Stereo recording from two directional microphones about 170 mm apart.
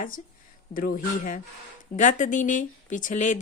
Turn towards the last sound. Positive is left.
turn(degrees=45)  # may be behind; listen again after turning